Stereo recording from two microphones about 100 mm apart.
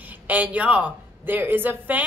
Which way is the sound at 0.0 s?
15° right (ahead or behind).